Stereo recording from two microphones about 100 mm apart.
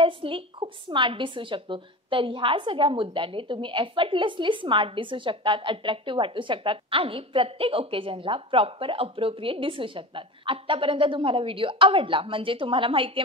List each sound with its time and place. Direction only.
0.0 s a woman's voice: 65° right (ahead or behind)